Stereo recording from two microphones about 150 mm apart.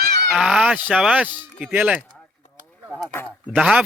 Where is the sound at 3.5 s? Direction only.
5° right (ahead or behind).